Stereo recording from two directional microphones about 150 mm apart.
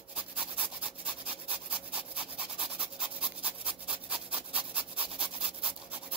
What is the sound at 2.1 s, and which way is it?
Rub, 5° right (ahead or behind).